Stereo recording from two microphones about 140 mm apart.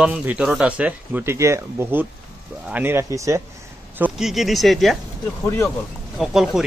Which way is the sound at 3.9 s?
5° right (ahead or behind).